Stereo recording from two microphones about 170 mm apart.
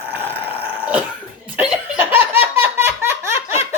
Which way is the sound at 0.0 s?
10° right (ahead or behind).